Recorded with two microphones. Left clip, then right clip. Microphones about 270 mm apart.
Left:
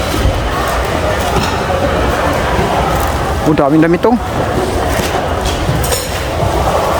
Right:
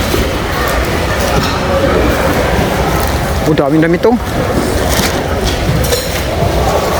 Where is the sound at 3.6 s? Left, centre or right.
Centre.